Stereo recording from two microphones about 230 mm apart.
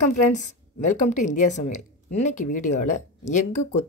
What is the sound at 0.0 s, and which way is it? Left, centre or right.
Speech, left.